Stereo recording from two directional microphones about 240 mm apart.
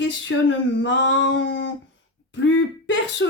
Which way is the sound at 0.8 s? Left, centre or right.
Left.